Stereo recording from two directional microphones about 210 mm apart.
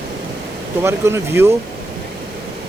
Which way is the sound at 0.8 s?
10° right (ahead or behind).